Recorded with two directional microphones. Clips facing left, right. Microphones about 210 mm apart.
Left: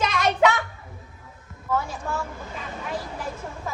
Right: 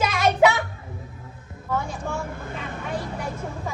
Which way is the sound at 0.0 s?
5° right (ahead or behind).